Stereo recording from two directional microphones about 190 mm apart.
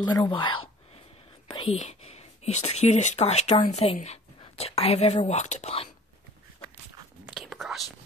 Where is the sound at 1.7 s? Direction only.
35° left (ahead or behind).